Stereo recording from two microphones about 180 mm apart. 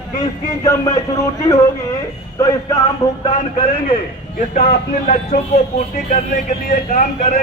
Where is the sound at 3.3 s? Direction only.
30° left (ahead or behind).